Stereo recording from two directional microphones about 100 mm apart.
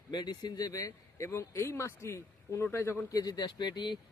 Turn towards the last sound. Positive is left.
turn(degrees=50)  # may be behind; listen again after turning